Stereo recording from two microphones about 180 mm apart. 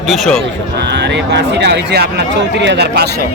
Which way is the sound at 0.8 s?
70° right (ahead or behind).